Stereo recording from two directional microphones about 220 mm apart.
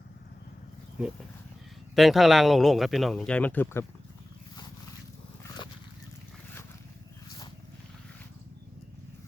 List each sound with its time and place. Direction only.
2.0 s speech: centre (ahead or behind)
7.3 s vehicle: 20° left (ahead or behind)